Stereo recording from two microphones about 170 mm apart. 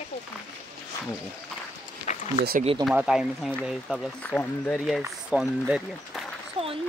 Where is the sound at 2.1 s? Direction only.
45° left (ahead or behind).